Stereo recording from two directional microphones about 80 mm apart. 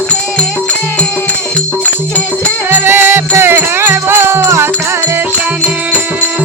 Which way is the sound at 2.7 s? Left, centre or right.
Right.